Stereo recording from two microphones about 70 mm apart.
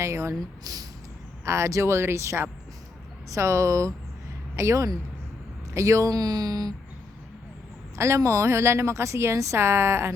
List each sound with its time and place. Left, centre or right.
0.0 s speech: right
0.6 s speech: right
1.5 s speech: right
7.9 s speech: right